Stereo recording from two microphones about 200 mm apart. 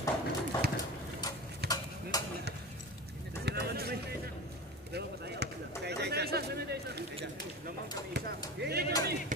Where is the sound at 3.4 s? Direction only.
50° right (ahead or behind).